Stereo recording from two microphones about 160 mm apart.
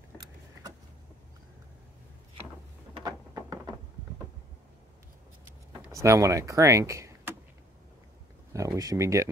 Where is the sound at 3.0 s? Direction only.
25° right (ahead or behind).